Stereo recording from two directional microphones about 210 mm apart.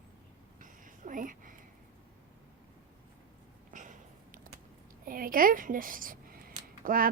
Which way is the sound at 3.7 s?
35° right (ahead or behind).